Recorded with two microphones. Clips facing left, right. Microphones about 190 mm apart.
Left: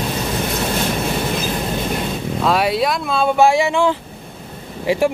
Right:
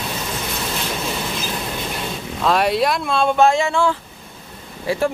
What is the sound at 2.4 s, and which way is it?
Speech, centre (ahead or behind).